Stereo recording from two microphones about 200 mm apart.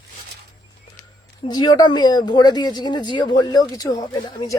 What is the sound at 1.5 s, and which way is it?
Speech, 20° left (ahead or behind).